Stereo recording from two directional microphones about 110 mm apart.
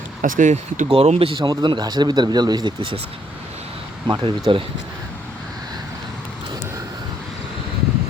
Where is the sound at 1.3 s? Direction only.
45° right (ahead or behind).